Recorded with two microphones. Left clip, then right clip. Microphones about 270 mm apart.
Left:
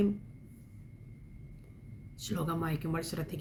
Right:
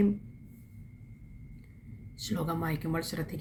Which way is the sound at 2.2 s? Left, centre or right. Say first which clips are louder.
Right 2 dB; centre.